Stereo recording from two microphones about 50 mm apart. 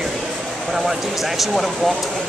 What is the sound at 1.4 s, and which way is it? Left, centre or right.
Speech, centre.